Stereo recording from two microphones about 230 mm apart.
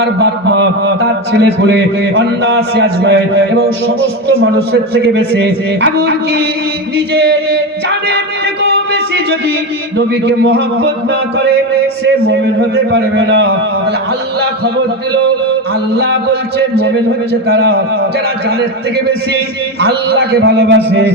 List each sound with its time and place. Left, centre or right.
0.0 s a man's voice: right
10.2 s a man's voice: right
12.0 s a man's voice: right
20.4 s a man's voice: right